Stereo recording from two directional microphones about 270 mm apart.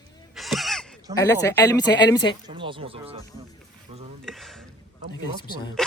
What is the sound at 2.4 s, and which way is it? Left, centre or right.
Speech, centre.